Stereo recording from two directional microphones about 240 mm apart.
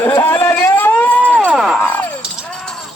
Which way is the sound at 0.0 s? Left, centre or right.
Centre.